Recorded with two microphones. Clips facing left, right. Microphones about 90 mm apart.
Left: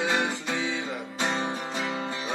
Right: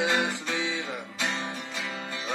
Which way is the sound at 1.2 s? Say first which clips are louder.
Left 5 dB; 40° left (ahead or behind).